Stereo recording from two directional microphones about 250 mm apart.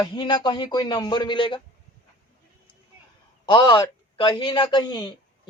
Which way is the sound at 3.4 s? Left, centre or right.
Centre.